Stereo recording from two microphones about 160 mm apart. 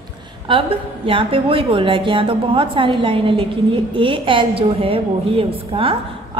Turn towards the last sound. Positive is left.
turn(degrees=-35)  # may be behind; listen again after turning